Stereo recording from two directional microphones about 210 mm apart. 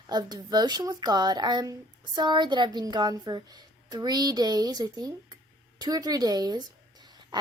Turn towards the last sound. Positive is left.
turn(degrees=-20)  # may be behind; listen again after turning